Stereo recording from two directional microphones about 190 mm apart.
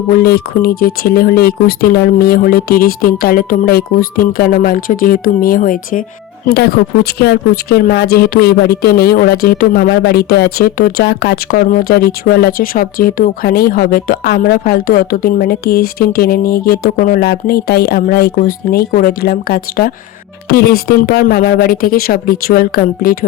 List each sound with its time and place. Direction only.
0.2 s speech: 55° left (ahead or behind)
6.4 s speech: 55° left (ahead or behind)